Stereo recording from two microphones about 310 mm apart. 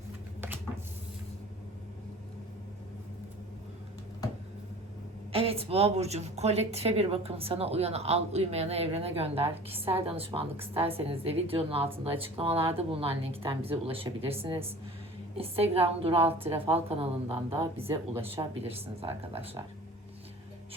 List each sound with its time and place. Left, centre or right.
5.3 s speech: centre